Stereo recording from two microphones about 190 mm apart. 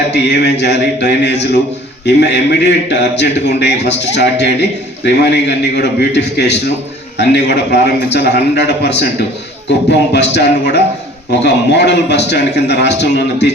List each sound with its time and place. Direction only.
0.1 s a man's voice: 60° left (ahead or behind)